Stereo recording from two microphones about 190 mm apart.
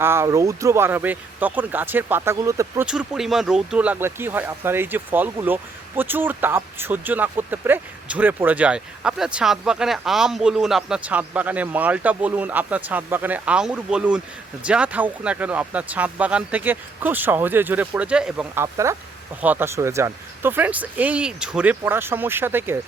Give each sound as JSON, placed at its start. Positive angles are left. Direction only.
{"t": 0.0, "sound": "speech", "side_deg": -15}
{"t": 2.8, "sound": "speech", "side_deg": -5}